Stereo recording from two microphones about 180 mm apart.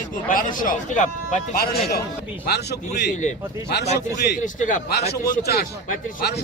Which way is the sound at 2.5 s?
65° left (ahead or behind).